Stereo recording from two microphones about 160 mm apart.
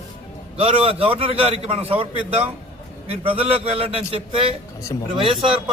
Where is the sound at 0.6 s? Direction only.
35° right (ahead or behind).